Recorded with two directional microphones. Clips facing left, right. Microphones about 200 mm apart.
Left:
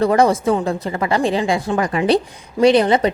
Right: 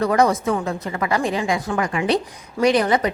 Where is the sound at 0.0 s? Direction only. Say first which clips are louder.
Left 3 dB; 30° left (ahead or behind).